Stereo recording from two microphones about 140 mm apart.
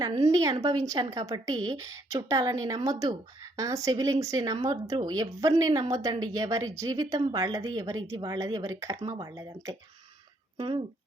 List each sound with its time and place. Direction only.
0.1 s speech: 25° right (ahead or behind)